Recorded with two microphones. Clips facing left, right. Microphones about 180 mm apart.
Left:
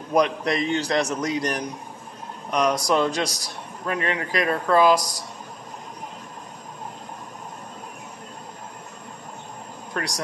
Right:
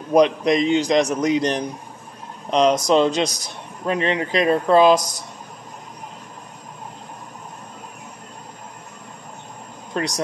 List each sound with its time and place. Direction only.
0.1 s a man's voice: 20° right (ahead or behind)
9.9 s a man's voice: 20° right (ahead or behind)